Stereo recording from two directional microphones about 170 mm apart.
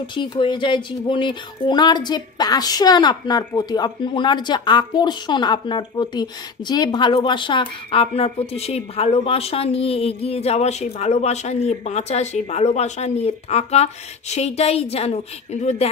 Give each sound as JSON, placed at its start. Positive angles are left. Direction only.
{"t": 0.0, "sound": "a woman's voice", "side_deg": 30}